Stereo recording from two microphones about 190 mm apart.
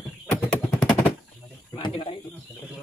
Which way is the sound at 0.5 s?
5° left (ahead or behind).